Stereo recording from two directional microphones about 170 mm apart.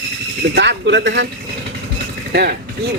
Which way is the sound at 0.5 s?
90° right.